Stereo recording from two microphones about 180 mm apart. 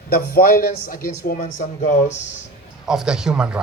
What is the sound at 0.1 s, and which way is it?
Speech, 55° left (ahead or behind).